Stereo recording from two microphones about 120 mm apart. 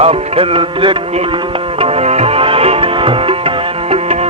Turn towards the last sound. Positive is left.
turn(degrees=-50)  # may be behind; listen again after turning